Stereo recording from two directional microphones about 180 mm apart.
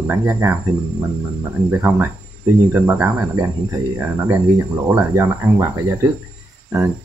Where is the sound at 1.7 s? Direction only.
15° right (ahead or behind).